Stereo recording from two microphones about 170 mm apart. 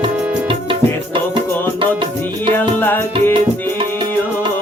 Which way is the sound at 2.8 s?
10° left (ahead or behind).